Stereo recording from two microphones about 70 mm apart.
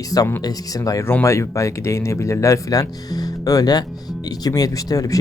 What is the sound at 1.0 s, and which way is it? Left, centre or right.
Speech, left.